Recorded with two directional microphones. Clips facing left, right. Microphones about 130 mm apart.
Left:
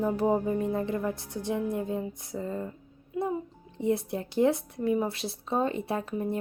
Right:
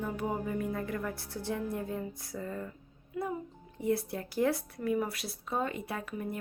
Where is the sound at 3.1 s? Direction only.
25° left (ahead or behind).